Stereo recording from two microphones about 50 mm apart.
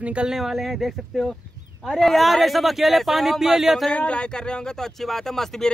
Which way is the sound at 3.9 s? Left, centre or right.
Left.